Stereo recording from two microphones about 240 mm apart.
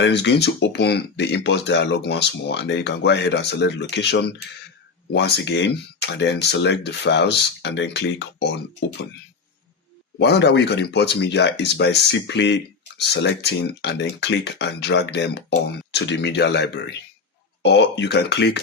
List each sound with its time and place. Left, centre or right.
0.0 s speech: left
10.2 s speech: left